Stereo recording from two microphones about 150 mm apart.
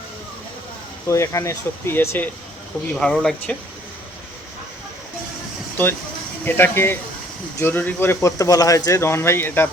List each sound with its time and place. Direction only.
1.0 s speech: 20° left (ahead or behind)
2.9 s speech: 5° left (ahead or behind)
6.4 s speech: 15° left (ahead or behind)